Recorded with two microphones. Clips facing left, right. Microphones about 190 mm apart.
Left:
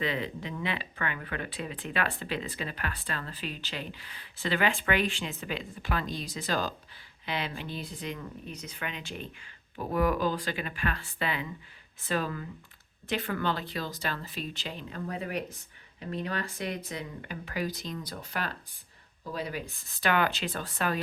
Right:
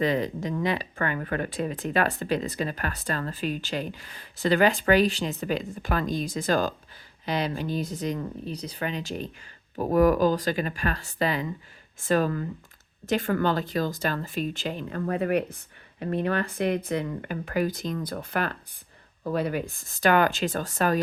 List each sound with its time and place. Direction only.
0.0 s speech: 40° right (ahead or behind)